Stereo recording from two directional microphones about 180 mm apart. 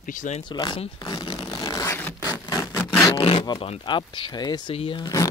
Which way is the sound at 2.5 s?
20° left (ahead or behind).